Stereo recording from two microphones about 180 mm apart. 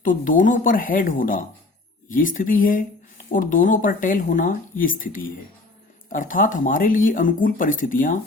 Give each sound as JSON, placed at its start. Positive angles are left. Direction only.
{"t": 0.0, "sound": "speech", "side_deg": 50}